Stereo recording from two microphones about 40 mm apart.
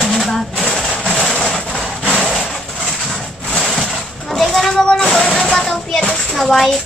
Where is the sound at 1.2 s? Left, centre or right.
Centre.